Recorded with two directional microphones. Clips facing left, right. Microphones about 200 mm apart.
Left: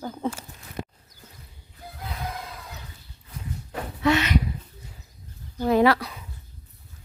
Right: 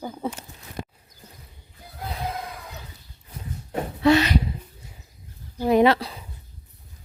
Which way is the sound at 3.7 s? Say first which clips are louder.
Right 4 dB; 35° right (ahead or behind).